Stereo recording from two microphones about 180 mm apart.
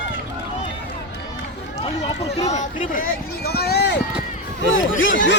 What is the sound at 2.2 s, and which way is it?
Speech, 40° left (ahead or behind).